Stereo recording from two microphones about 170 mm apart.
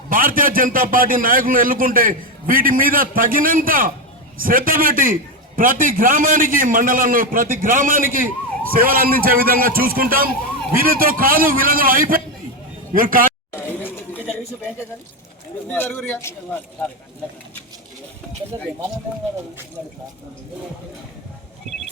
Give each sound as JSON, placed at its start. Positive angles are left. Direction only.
{"t": 0.1, "sound": "a man's voice", "side_deg": -55}
{"t": 13.5, "sound": "a sound", "side_deg": 15}
{"t": 15.7, "sound": "speech", "side_deg": 10}